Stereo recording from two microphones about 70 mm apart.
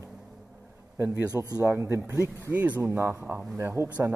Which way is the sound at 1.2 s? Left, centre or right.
Right.